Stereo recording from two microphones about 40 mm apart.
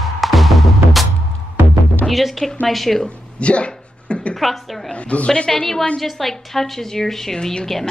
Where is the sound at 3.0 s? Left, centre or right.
Left.